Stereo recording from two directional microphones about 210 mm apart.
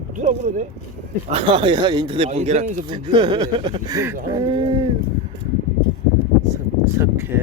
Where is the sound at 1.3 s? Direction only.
25° right (ahead or behind).